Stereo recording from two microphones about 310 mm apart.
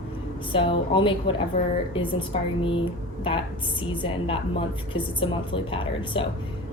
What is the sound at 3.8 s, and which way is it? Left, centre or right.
A woman's voice, centre.